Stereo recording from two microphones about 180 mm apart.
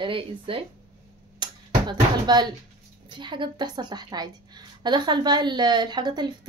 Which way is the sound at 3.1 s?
25° right (ahead or behind).